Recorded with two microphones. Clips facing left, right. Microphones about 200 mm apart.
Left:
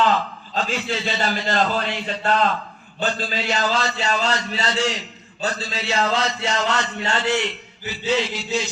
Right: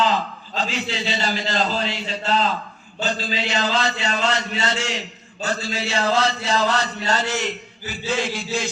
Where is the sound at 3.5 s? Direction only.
40° left (ahead or behind).